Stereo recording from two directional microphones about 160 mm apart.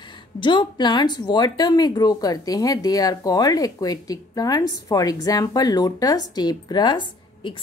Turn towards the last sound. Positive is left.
turn(degrees=30)  # may be behind; listen again after turning